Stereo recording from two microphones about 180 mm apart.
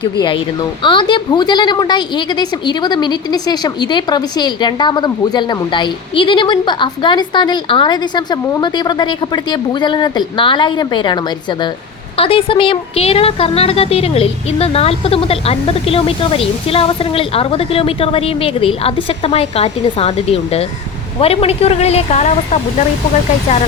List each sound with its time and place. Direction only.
0.0 s a woman's voice: 25° left (ahead or behind)